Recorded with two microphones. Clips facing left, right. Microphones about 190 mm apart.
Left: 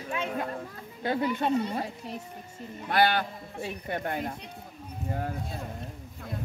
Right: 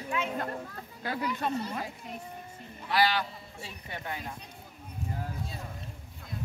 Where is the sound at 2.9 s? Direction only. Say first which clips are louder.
Left 3 dB; 55° left (ahead or behind).